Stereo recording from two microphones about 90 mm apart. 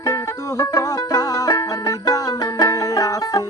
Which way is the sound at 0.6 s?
40° left (ahead or behind).